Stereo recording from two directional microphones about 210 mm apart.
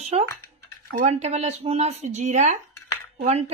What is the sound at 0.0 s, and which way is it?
A woman's voice, 30° right (ahead or behind).